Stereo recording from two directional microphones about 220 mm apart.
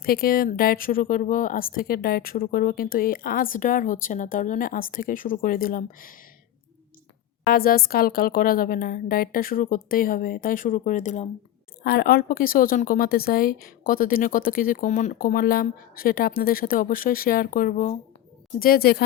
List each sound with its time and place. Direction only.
0.0 s speech: 45° left (ahead or behind)
7.4 s speech: 40° left (ahead or behind)